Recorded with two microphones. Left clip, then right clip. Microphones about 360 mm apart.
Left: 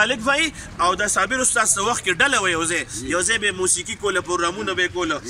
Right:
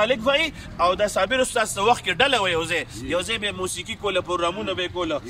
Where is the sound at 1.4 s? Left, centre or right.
Right.